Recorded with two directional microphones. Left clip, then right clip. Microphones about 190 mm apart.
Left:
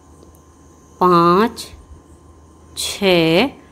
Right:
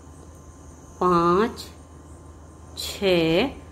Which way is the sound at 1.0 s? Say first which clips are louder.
Left 7 dB; 30° left (ahead or behind).